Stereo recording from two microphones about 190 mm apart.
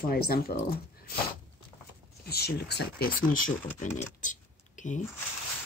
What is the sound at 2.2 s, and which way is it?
Speech, 55° left (ahead or behind).